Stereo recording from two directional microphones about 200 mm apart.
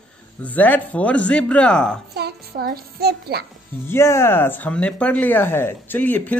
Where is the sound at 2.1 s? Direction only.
50° right (ahead or behind).